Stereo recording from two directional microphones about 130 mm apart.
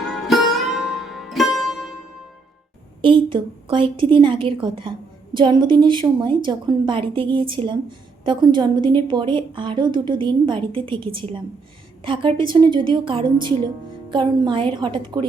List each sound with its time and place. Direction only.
0.1 s music: centre (ahead or behind)
3.0 s a woman's voice: 40° right (ahead or behind)